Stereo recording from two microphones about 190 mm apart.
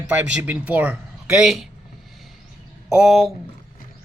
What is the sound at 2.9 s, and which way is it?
Speech, 5° right (ahead or behind).